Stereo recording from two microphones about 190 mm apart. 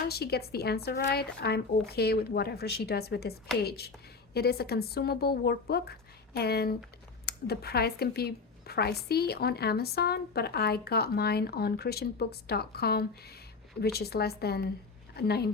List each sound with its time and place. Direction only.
0.1 s a woman's voice: 55° left (ahead or behind)